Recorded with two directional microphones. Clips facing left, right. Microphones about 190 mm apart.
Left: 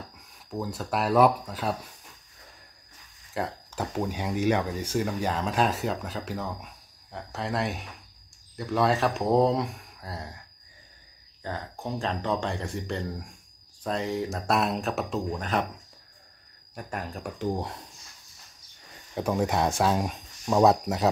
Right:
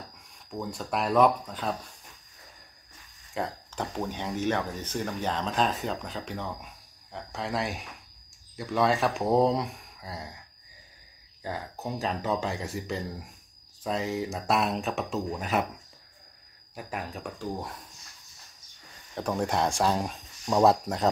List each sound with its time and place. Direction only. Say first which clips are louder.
0.5 s speech: left 2 dB; 5° left (ahead or behind)
3.3 s speech: left 1 dB; 5° left (ahead or behind)
11.4 s speech: even; 5° right (ahead or behind)
16.7 s speech: left 1 dB; centre (ahead or behind)
17.4 s speech: left 7 dB; 25° left (ahead or behind)
19.1 s speech: left 2 dB; 5° left (ahead or behind)